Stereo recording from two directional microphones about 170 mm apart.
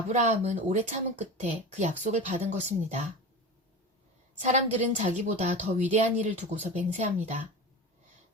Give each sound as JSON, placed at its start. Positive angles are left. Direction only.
{"t": 0.1, "sound": "speech", "side_deg": -45}
{"t": 4.4, "sound": "speech", "side_deg": -45}